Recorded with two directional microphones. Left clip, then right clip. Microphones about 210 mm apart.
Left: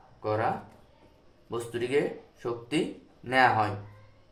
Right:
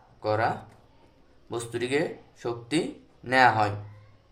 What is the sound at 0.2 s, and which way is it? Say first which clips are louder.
Speech: right 2 dB; 50° right (ahead or behind).